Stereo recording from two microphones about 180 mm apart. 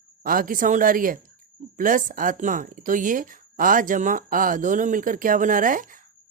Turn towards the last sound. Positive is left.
turn(degrees=-50)  # may be behind; listen again after turning